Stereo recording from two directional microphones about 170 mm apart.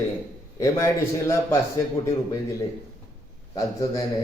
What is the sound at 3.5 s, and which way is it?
Speech, 20° left (ahead or behind).